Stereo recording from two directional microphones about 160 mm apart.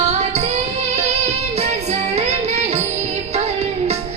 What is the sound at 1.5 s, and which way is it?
Music, 40° right (ahead or behind).